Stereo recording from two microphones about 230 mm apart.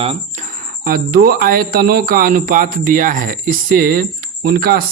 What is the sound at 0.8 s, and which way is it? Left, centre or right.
A man's voice, right.